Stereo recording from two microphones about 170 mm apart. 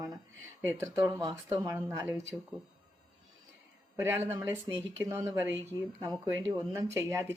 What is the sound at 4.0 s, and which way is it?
Speech, 15° right (ahead or behind).